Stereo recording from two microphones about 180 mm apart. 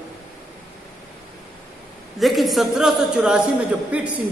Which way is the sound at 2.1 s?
Centre (ahead or behind).